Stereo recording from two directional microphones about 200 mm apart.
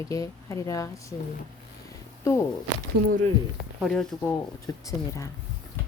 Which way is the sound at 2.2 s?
15° left (ahead or behind).